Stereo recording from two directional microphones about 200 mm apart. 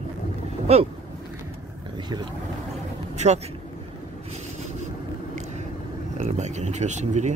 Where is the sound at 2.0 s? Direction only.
20° right (ahead or behind).